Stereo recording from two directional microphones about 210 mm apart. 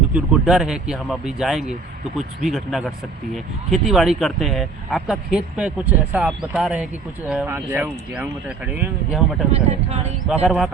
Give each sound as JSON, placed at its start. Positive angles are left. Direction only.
{"t": 0.1, "sound": "speech", "side_deg": -5}
{"t": 9.5, "sound": "speech", "side_deg": -30}
{"t": 10.4, "sound": "speech", "side_deg": 0}